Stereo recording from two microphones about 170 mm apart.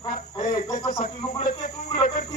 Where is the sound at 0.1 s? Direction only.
50° left (ahead or behind).